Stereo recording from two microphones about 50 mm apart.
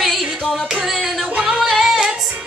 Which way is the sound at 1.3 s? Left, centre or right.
Centre.